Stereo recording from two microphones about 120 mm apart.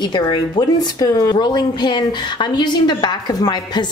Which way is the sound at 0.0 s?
35° left (ahead or behind).